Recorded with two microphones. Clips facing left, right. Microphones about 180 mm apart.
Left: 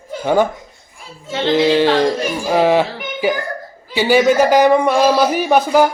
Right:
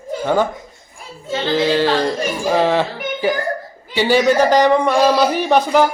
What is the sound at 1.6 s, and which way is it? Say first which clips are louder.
Speech: left 3 dB; 15° left (ahead or behind).